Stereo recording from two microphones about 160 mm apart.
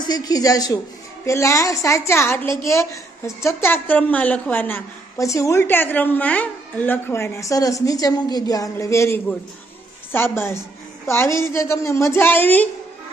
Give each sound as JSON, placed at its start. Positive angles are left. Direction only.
{"t": 0.0, "sound": "a woman's voice", "side_deg": 25}